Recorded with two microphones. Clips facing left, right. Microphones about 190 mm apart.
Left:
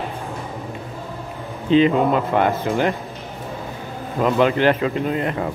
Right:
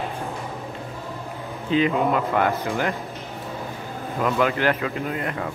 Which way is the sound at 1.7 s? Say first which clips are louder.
Left 5 dB; 25° left (ahead or behind).